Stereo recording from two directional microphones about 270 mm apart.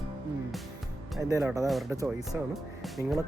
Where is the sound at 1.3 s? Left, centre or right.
Centre.